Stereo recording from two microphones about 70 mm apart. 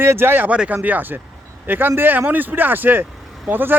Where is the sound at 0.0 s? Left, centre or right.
Right.